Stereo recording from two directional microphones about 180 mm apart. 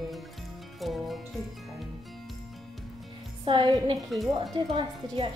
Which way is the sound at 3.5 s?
25° right (ahead or behind).